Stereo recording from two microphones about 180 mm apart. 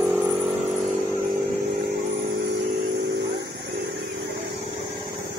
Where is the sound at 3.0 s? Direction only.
75° right (ahead or behind).